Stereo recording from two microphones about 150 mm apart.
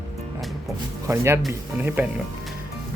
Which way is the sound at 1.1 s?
20° right (ahead or behind).